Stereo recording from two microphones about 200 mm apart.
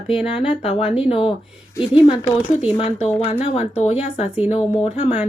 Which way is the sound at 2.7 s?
25° left (ahead or behind).